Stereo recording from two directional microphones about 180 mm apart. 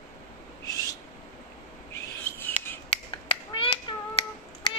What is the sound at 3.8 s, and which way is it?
Finger snapping, 25° left (ahead or behind).